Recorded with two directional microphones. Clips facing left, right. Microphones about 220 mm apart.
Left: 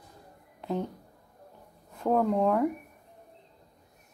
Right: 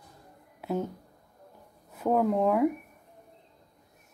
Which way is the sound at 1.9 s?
5° right (ahead or behind).